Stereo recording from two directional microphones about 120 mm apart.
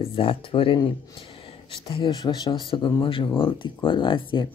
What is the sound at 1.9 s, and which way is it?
Speech, 40° left (ahead or behind).